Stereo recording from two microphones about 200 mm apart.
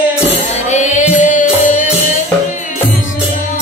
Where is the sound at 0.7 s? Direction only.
40° left (ahead or behind).